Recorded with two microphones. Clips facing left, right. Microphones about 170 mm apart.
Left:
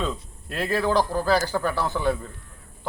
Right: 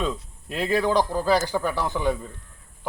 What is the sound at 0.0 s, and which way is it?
Speech, 15° right (ahead or behind).